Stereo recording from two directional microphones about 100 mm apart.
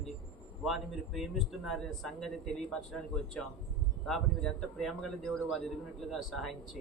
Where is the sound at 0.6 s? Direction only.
Centre (ahead or behind).